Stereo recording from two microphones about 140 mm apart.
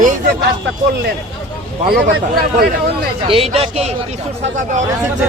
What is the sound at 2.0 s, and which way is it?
Speech, 90° right.